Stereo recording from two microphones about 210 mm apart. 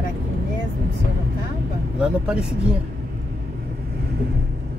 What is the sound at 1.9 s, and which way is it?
Speech, 5° right (ahead or behind).